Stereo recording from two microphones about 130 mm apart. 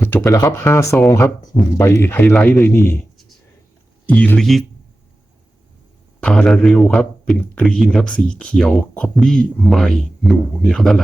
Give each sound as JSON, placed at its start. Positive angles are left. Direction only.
{"t": 0.0, "sound": "speech", "side_deg": 20}
{"t": 6.1, "sound": "speech", "side_deg": 5}